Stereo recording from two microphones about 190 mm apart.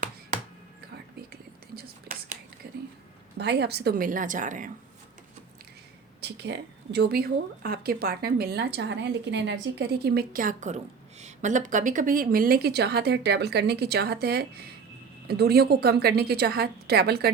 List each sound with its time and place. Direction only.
1.3 s whispering: 50° right (ahead or behind)
2.6 s a sound: 50° right (ahead or behind)
3.3 s a woman's voice: 60° right (ahead or behind); by 4.7 s 40° right (ahead or behind)
6.2 s speech: 60° right (ahead or behind)